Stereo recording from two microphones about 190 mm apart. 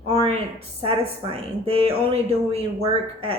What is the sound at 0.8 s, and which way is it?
A woman's voice, 30° right (ahead or behind).